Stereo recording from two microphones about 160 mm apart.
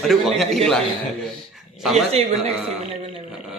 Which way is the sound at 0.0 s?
Centre (ahead or behind).